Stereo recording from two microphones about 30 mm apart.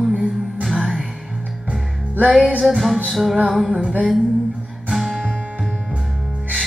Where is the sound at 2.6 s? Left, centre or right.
Right.